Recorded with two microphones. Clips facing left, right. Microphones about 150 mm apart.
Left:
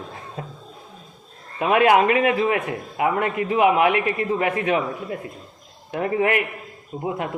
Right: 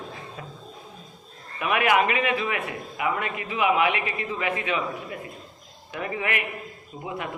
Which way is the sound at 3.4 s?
40° left (ahead or behind).